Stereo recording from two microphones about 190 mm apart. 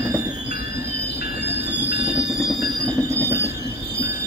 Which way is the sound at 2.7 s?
20° right (ahead or behind).